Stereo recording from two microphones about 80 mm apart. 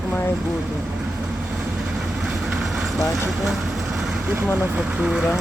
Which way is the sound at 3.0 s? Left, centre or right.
Centre.